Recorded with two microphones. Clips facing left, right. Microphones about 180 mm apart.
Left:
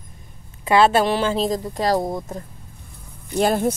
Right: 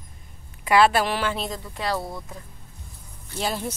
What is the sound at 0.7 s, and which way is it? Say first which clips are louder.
Speech: left 3 dB; 25° left (ahead or behind).